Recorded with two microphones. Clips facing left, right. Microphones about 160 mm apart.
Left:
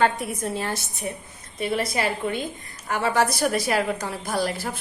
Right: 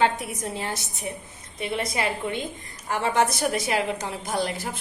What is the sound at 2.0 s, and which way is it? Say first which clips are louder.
A woman's voice: left 2 dB; 25° right (ahead or behind).